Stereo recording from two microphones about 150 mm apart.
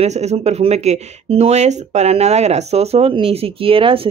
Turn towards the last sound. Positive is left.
turn(degrees=-35)  # may be behind; listen again after turning